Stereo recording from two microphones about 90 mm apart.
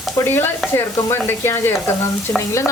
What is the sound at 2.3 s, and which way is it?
Stir, 40° left (ahead or behind).